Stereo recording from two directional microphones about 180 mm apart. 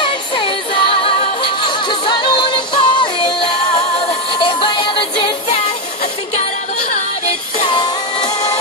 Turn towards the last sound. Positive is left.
turn(degrees=30)  # may be behind; listen again after turning